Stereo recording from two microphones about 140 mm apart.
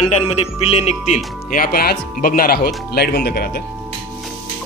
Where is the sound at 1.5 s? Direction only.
85° left.